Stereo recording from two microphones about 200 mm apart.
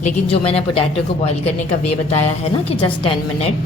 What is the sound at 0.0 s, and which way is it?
Speech, 30° left (ahead or behind).